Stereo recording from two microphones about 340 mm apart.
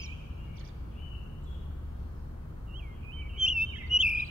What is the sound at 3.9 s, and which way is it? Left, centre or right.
Bird vocalization, right.